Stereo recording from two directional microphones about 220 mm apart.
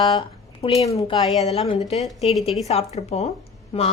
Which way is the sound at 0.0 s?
20° left (ahead or behind).